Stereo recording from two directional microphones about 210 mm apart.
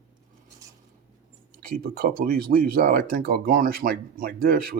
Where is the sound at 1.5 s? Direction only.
45° right (ahead or behind).